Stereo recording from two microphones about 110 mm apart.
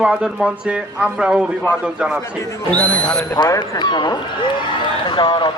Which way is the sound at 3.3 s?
35° left (ahead or behind).